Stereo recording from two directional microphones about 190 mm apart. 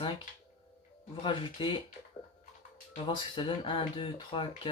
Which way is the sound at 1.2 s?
25° left (ahead or behind).